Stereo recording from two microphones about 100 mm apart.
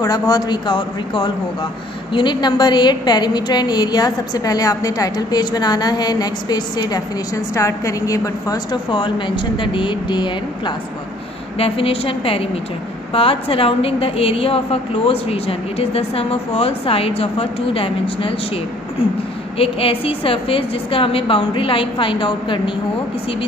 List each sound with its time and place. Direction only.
0.0 s a woman's voice: 40° left (ahead or behind)
8.9 s a woman's voice: 55° left (ahead or behind)
11.5 s a woman's voice: 75° left (ahead or behind)
19.6 s a woman's voice: 70° left (ahead or behind)